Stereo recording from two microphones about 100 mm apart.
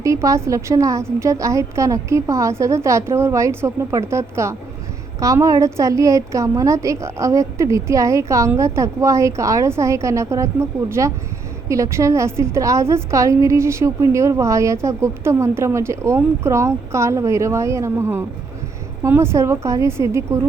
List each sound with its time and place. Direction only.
0.0 s a woman's voice: 30° right (ahead or behind)